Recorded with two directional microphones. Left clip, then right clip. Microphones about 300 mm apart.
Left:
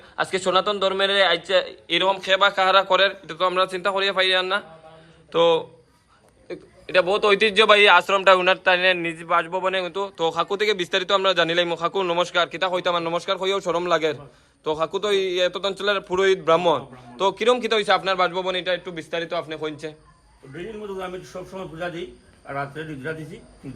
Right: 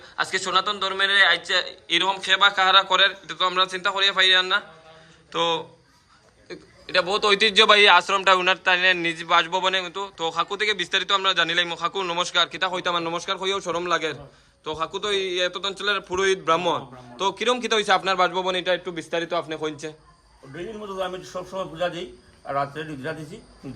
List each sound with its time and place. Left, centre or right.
0.2 s a man's voice: centre
22.4 s a man's voice: right